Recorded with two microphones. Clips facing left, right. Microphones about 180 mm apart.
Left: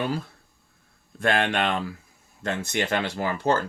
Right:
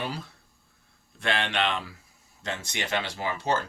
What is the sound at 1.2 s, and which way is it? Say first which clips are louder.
Speech: left 5 dB; 50° left (ahead or behind).